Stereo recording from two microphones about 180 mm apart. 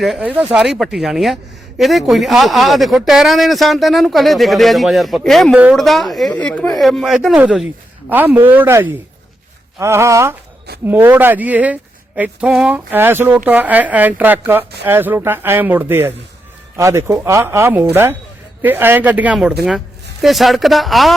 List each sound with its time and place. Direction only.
0.0 s speech: 5° right (ahead or behind)